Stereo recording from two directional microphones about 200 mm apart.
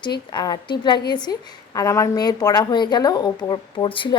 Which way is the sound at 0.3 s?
20° left (ahead or behind).